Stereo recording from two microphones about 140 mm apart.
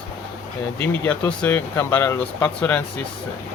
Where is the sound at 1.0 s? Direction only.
10° left (ahead or behind).